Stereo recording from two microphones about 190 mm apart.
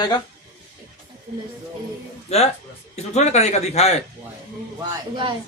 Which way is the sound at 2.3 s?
35° left (ahead or behind).